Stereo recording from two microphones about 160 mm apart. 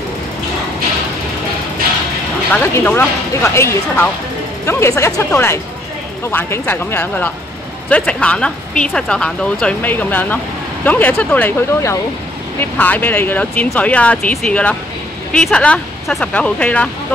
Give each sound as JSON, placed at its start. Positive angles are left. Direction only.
{"t": 2.5, "sound": "speech", "side_deg": 10}